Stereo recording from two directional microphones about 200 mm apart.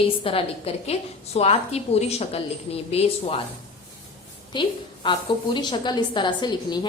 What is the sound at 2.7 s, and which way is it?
Speech, 30° left (ahead or behind).